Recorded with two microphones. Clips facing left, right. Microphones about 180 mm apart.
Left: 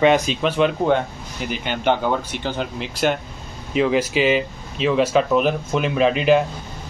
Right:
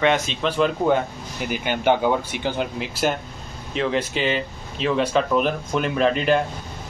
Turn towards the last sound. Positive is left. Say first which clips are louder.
# left 3 dB
turn(degrees=5)  # may be behind; listen again after turning